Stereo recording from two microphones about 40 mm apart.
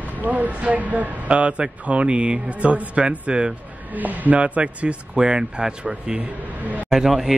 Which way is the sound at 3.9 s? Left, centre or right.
Right.